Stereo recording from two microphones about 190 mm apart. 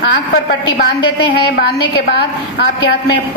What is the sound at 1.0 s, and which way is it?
Speech, 25° left (ahead or behind).